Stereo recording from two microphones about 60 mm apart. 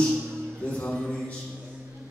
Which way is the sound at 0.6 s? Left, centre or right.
Left.